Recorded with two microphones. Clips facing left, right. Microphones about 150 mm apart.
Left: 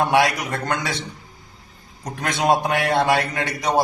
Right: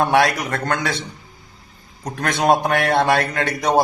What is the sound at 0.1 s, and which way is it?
Speech, 15° left (ahead or behind).